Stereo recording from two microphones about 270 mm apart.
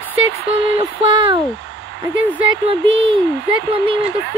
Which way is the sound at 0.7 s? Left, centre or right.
Centre.